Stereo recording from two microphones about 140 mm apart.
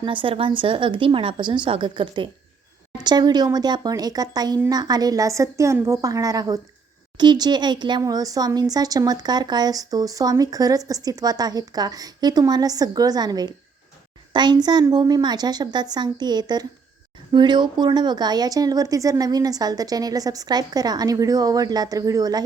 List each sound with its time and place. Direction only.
0.0 s a woman's voice: 35° right (ahead or behind)